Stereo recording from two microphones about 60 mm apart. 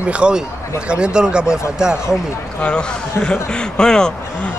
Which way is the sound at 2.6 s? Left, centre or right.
Centre.